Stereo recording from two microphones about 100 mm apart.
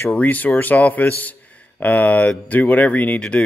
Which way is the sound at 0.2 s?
15° left (ahead or behind).